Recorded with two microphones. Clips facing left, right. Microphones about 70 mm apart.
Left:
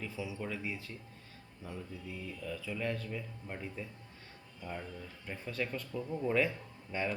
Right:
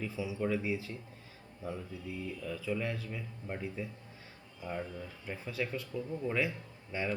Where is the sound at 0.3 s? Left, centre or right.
Centre.